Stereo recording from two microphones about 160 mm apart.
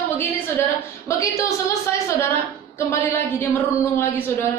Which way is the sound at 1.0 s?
20° left (ahead or behind).